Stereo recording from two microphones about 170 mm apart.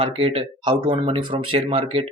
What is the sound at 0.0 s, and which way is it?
Speech, 35° right (ahead or behind).